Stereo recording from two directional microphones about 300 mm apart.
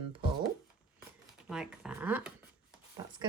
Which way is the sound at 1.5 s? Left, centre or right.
Centre.